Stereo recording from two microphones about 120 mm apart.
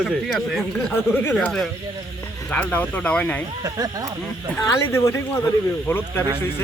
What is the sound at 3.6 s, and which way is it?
Speech, 35° right (ahead or behind).